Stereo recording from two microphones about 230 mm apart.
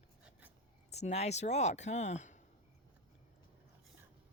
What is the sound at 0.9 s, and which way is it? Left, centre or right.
Speech, left.